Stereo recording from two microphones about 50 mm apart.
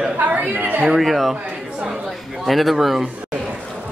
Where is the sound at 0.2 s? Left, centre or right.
Right.